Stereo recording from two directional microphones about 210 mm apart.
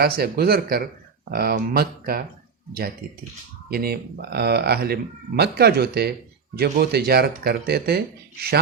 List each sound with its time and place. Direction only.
0.0 s speech: 50° right (ahead or behind)
3.7 s speech: 45° right (ahead or behind)